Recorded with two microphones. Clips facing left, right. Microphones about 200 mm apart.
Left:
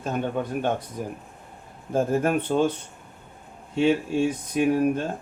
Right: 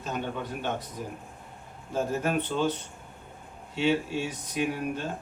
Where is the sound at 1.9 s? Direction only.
50° left (ahead or behind).